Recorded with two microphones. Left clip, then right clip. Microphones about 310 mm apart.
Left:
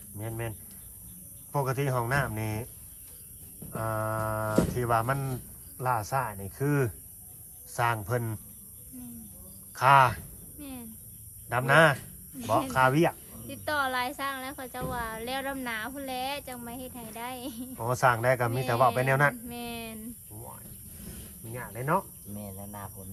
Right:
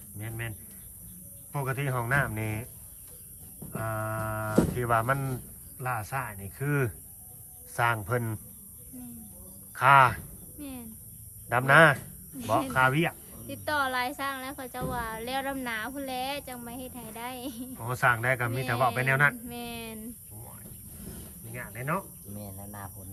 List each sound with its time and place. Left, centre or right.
0.2 s speech: centre
1.5 s speech: centre
3.7 s speech: centre
9.7 s a sound: centre
11.4 s speech: centre
21.2 s cricket: centre
22.4 s a sound: left